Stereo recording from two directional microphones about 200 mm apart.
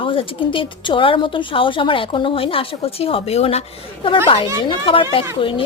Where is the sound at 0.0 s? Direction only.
25° left (ahead or behind).